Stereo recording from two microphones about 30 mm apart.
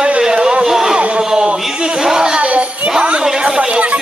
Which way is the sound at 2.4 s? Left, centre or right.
Right.